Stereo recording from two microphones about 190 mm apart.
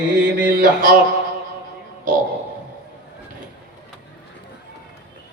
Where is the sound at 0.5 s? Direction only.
45° right (ahead or behind).